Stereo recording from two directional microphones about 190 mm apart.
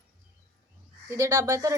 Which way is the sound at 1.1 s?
15° right (ahead or behind).